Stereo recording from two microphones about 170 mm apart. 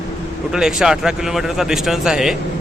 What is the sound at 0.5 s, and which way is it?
Speech, 5° right (ahead or behind).